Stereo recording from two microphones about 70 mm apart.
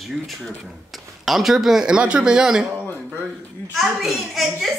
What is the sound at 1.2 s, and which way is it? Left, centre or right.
Speech, centre.